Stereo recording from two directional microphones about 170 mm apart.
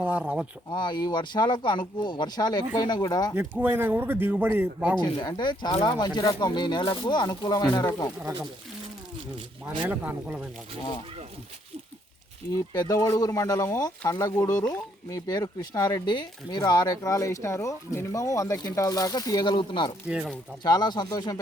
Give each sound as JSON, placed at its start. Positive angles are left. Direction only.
{"t": 0.0, "sound": "speech", "side_deg": -10}
{"t": 0.7, "sound": "speech", "side_deg": 25}
{"t": 3.3, "sound": "speech", "side_deg": -10}
{"t": 4.9, "sound": "speech", "side_deg": 25}
{"t": 9.9, "sound": "speech", "side_deg": -10}
{"t": 12.7, "sound": "speech", "side_deg": 25}
{"t": 20.1, "sound": "speech", "side_deg": -5}
{"t": 20.7, "sound": "speech", "side_deg": 25}